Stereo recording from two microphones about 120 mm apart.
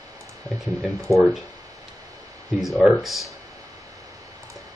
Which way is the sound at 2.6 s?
Centre (ahead or behind).